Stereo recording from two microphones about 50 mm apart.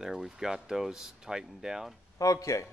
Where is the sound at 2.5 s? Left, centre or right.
Left.